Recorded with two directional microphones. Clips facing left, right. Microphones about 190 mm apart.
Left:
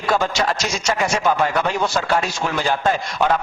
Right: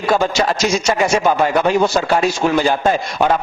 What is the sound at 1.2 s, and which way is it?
Speech, 15° right (ahead or behind).